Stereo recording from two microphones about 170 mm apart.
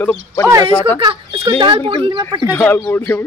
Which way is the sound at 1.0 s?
25° right (ahead or behind).